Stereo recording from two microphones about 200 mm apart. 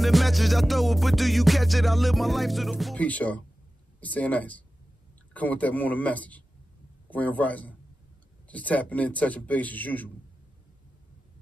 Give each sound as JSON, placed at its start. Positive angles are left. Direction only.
{"t": 0.0, "sound": "music", "side_deg": 0}
{"t": 4.0, "sound": "a man's voice", "side_deg": 5}